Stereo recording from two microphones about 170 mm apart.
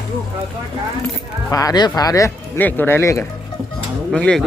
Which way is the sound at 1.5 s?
20° left (ahead or behind).